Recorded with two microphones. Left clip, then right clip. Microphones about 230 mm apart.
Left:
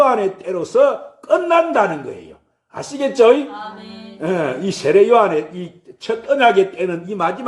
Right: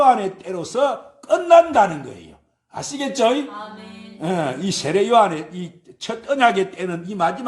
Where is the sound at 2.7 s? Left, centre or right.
Right.